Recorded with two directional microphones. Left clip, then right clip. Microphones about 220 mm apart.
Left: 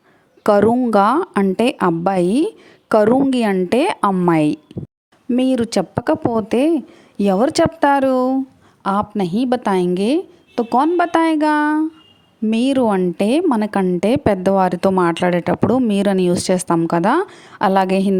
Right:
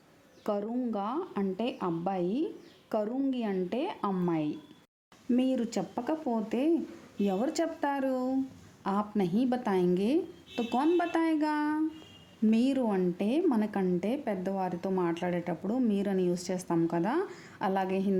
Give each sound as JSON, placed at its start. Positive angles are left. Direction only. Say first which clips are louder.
{"t": 0.4, "sound": "a woman's voice", "louder": "left 19 dB", "side_deg": 45}